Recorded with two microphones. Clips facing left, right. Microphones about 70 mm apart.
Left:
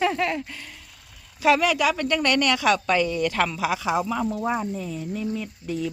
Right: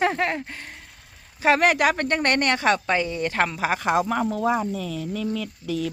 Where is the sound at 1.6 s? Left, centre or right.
Right.